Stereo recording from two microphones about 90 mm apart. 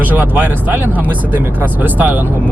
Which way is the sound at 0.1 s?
20° right (ahead or behind).